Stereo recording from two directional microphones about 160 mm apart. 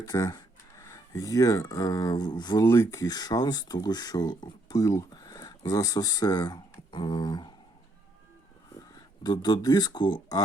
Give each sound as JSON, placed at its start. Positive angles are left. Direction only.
{"t": 0.0, "sound": "speech", "side_deg": 20}
{"t": 9.2, "sound": "speech", "side_deg": 25}